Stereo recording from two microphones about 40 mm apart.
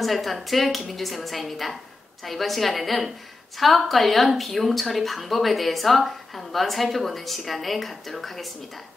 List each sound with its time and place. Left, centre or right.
0.0 s speech: centre